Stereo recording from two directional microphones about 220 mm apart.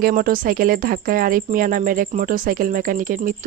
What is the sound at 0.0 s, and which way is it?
A woman's voice, 40° right (ahead or behind).